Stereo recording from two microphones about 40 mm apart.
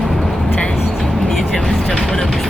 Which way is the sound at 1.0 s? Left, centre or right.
Centre.